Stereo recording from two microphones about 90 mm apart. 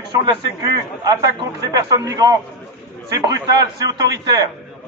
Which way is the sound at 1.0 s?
45° right (ahead or behind).